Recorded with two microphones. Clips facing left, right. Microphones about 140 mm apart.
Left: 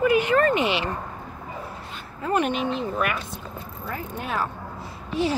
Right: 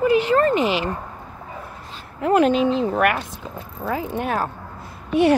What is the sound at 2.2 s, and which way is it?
Speech, 90° right.